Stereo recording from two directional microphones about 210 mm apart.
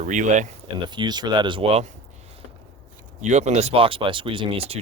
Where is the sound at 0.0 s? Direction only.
35° right (ahead or behind).